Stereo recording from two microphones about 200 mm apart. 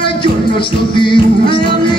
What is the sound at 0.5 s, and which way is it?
Music, 25° left (ahead or behind).